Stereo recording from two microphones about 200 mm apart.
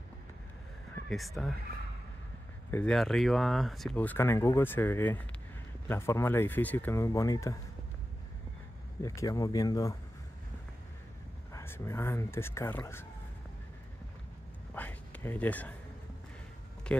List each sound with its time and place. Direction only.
1.1 s speech: centre (ahead or behind)
2.7 s speech: 5° left (ahead or behind)
9.0 s speech: 15° left (ahead or behind)
11.5 s speech: 10° left (ahead or behind)
14.7 s a sound: 10° left (ahead or behind)